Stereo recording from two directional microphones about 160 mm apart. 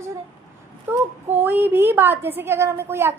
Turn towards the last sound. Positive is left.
turn(degrees=-15)  # may be behind; listen again after turning